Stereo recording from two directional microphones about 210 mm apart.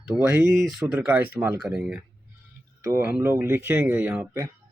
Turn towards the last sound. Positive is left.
turn(degrees=-10)  # may be behind; listen again after turning